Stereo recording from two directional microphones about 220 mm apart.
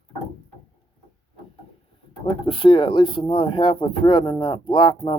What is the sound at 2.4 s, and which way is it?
Speech, 25° left (ahead or behind).